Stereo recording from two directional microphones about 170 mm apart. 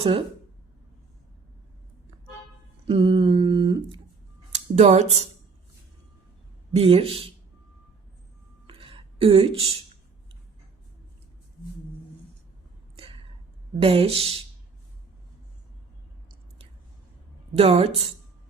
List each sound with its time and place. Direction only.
0.0 s speech: 35° right (ahead or behind)
2.8 s a sound: 30° right (ahead or behind)
4.5 s speech: 40° right (ahead or behind)
6.7 s speech: 35° right (ahead or behind)
8.6 s a sound: 30° right (ahead or behind)
13.7 s speech: 35° right (ahead or behind)
17.6 s speech: 35° right (ahead or behind)